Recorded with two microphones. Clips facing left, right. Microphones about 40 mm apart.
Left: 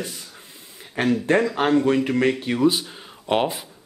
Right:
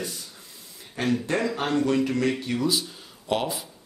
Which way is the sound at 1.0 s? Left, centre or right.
Left.